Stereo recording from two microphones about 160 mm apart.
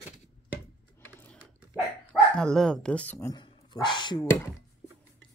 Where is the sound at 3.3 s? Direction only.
30° left (ahead or behind).